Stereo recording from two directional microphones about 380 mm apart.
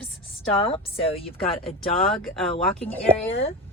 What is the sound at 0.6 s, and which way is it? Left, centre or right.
A woman's voice, centre.